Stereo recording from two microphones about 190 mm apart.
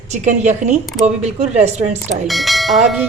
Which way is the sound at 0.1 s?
40° right (ahead or behind).